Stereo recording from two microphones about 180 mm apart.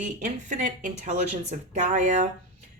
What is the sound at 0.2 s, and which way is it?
A woman's voice, 40° right (ahead or behind).